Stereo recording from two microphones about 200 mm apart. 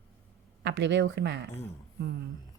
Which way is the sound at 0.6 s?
60° right (ahead or behind).